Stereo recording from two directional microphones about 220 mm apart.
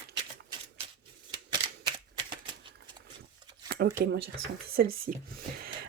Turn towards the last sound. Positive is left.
turn(degrees=-40)  # may be behind; listen again after turning